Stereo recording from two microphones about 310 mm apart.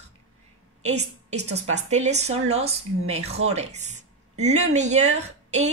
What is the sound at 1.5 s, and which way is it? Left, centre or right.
Speech, right.